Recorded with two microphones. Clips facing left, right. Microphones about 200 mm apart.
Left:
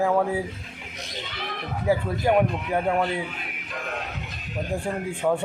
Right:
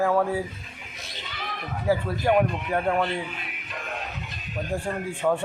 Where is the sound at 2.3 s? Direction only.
Centre (ahead or behind).